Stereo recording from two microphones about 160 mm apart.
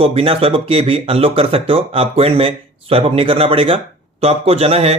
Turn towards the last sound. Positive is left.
turn(degrees=-40)  # may be behind; listen again after turning